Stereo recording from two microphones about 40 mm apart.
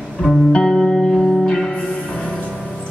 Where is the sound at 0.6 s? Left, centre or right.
Centre.